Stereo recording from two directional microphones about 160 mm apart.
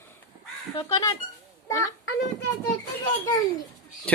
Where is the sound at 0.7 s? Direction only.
20° left (ahead or behind).